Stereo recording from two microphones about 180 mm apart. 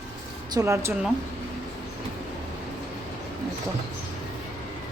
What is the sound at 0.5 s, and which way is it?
Speech, 15° right (ahead or behind).